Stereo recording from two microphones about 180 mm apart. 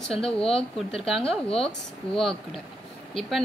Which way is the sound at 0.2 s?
30° left (ahead or behind).